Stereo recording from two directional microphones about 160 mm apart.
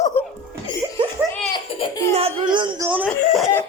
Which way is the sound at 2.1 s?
35° right (ahead or behind).